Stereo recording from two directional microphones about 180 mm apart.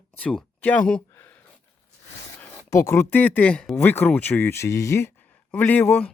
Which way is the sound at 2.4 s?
15° left (ahead or behind).